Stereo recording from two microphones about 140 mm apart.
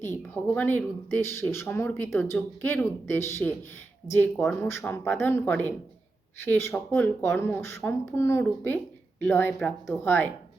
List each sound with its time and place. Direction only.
0.2 s speech: 10° left (ahead or behind)